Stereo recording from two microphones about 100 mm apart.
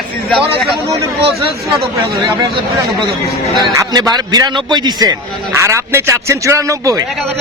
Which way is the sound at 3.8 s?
45° right (ahead or behind).